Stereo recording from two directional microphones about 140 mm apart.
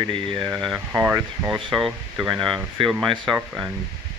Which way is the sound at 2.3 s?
35° right (ahead or behind).